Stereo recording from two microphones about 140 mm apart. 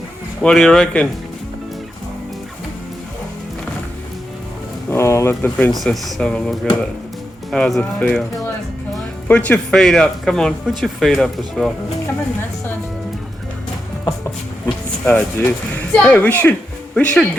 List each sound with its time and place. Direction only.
0.4 s speech: 5° left (ahead or behind)
4.9 s a sound: 20° left (ahead or behind)
5.7 s speech: centre (ahead or behind)
15.0 s speech: 10° left (ahead or behind)